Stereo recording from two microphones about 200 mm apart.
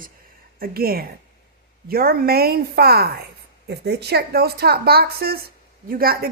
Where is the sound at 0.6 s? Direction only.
50° right (ahead or behind).